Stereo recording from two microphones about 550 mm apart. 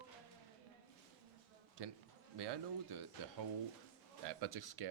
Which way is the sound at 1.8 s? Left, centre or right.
Right.